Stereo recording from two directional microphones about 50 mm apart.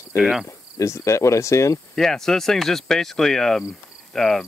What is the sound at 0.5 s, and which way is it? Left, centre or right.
Cricket, left.